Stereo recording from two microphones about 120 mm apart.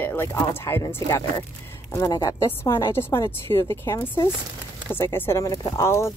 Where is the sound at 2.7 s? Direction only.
20° left (ahead or behind).